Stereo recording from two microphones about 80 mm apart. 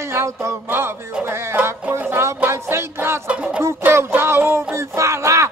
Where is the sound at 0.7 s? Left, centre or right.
Right.